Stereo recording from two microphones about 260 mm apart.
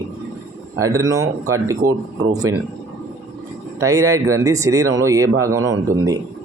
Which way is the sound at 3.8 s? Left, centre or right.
Centre.